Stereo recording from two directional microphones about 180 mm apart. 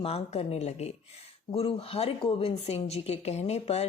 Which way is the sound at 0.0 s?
35° left (ahead or behind).